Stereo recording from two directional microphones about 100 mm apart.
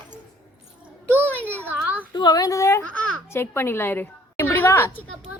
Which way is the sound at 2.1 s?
45° left (ahead or behind).